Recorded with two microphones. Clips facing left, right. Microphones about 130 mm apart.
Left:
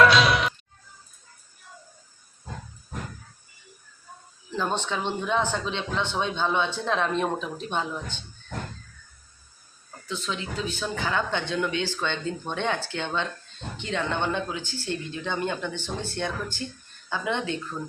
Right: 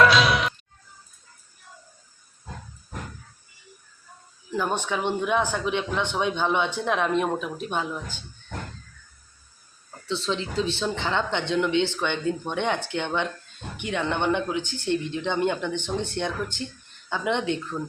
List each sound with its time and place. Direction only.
0.0 s music: centre (ahead or behind)
4.5 s speech: 10° right (ahead or behind)
10.1 s speech: 30° right (ahead or behind)